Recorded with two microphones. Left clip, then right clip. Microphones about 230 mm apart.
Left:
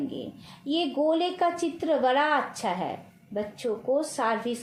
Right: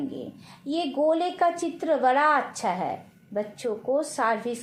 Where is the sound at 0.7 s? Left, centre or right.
Right.